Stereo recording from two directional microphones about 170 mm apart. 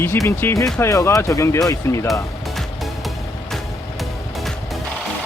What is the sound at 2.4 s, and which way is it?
Music, centre (ahead or behind).